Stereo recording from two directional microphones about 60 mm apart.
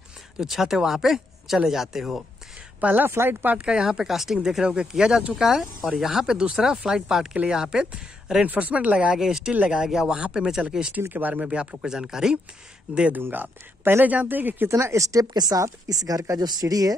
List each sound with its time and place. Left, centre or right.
0.4 s speech: centre
2.8 s speech: right
3.1 s speech: right
3.5 s speech: centre
11.0 s speech: right
11.5 s speech: centre
13.1 s speech: right
14.7 s speech: right